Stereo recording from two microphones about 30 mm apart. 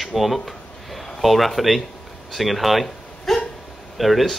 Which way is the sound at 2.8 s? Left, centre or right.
Centre.